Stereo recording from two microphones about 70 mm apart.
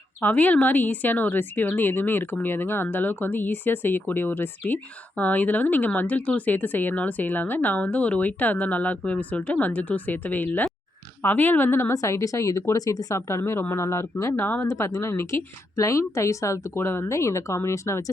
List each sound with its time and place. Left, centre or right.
0.2 s a woman's voice: left
14.7 s a woman's voice: left
16.7 s a woman's voice: left